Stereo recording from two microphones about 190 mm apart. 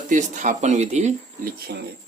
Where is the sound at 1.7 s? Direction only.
55° right (ahead or behind).